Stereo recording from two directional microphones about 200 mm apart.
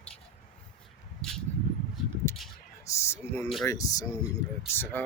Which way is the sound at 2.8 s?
15° left (ahead or behind).